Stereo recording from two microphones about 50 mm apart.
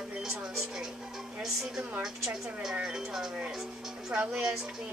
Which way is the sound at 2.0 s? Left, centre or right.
Centre.